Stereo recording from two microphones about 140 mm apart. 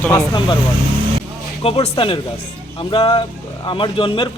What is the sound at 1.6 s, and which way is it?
A man's voice, 45° left (ahead or behind).